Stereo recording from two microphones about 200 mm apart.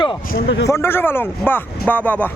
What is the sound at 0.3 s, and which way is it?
Speech, 55° left (ahead or behind).